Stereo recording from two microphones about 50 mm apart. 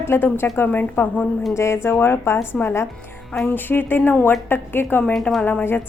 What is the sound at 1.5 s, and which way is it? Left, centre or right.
A woman's voice, left.